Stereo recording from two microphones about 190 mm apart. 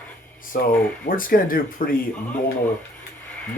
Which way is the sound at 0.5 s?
50° left (ahead or behind).